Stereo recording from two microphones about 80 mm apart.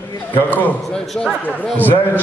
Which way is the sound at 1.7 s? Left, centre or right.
Left.